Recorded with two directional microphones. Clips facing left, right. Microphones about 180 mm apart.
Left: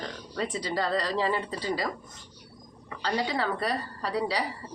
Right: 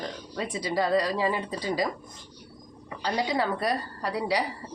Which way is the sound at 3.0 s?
15° right (ahead or behind).